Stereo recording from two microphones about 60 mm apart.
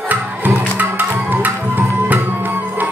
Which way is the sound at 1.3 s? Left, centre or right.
Right.